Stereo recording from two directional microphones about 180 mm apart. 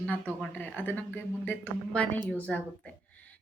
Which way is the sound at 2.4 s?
10° left (ahead or behind).